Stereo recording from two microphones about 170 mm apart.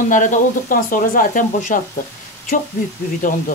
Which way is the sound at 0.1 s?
50° left (ahead or behind).